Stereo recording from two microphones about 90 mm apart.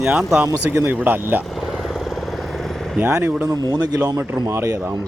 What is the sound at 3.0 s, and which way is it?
Speech, 20° right (ahead or behind).